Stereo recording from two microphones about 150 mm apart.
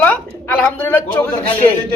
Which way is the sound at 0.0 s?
10° left (ahead or behind).